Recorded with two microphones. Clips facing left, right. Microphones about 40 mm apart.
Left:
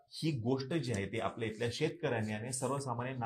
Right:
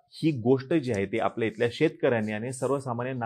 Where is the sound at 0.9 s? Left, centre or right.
Right.